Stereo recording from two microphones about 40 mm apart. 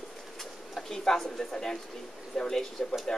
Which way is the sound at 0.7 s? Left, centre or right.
Centre.